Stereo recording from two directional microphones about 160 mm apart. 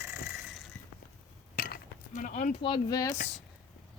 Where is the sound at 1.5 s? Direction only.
65° left (ahead or behind).